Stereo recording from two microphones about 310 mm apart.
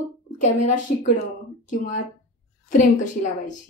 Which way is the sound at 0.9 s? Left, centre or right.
Left.